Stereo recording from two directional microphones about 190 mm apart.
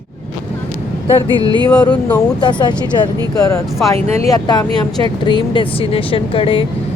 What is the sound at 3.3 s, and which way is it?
A woman's voice, 15° left (ahead or behind).